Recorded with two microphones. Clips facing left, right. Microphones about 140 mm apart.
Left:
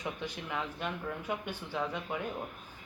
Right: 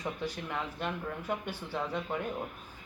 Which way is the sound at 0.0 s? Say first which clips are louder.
Right 2 dB; centre (ahead or behind).